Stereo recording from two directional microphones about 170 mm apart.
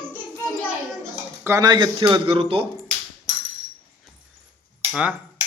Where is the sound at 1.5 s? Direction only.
20° right (ahead or behind).